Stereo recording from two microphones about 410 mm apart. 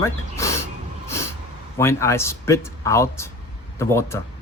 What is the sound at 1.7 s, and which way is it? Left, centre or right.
Speech, centre.